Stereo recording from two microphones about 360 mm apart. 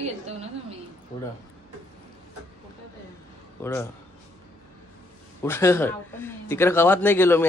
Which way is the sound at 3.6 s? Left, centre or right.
Centre.